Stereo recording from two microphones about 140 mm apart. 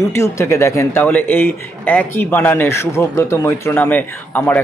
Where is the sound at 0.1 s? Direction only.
20° left (ahead or behind).